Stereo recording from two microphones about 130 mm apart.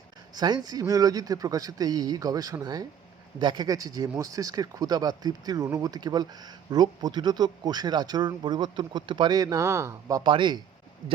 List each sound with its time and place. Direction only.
0.3 s speech: 30° right (ahead or behind)
10.2 s speech: 35° right (ahead or behind)